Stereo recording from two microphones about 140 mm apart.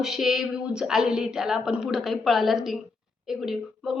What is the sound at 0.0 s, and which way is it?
A woman's voice, centre (ahead or behind).